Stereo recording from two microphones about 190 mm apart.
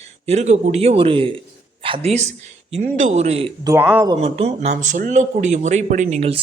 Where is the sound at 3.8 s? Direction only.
5° right (ahead or behind).